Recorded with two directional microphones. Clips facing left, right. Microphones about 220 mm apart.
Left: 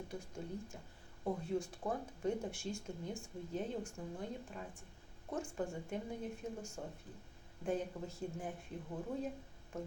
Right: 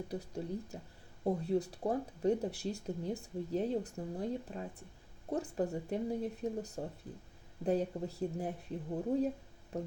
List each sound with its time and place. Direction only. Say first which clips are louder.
0.1 s speech: right 6 dB; 35° right (ahead or behind)